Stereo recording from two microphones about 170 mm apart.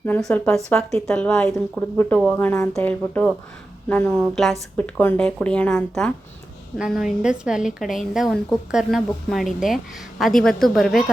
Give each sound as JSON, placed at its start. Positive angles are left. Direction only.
{"t": 0.0, "sound": "a woman's voice", "side_deg": 5}